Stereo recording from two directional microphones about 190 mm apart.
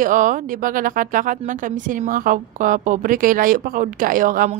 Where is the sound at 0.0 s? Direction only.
45° right (ahead or behind).